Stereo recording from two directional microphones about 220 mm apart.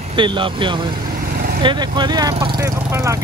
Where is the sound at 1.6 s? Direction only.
20° right (ahead or behind).